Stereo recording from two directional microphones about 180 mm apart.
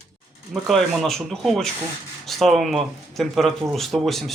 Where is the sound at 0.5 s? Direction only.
Centre (ahead or behind).